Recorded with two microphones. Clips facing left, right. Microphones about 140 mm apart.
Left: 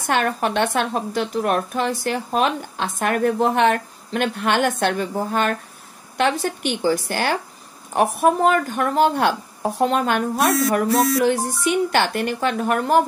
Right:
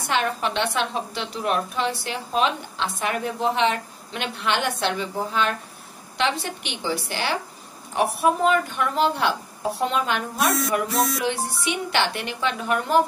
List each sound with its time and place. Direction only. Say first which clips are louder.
0.0 s a woman's voice: left 3 dB; 50° left (ahead or behind)